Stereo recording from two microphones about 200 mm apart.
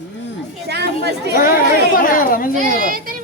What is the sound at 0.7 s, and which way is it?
Chatter, 55° right (ahead or behind).